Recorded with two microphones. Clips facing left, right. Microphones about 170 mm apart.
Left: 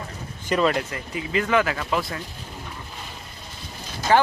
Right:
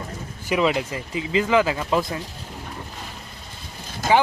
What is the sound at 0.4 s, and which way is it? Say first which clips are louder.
Speech: even; 10° right (ahead or behind).